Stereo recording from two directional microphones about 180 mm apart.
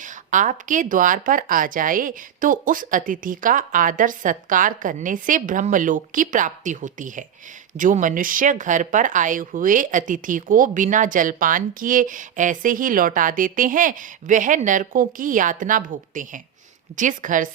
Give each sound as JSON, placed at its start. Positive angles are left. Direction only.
{"t": 0.0, "sound": "speech", "side_deg": -45}